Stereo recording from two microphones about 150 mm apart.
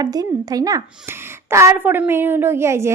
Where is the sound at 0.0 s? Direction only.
25° right (ahead or behind).